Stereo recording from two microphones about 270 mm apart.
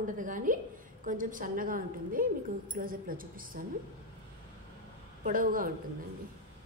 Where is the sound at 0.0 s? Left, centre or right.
Right.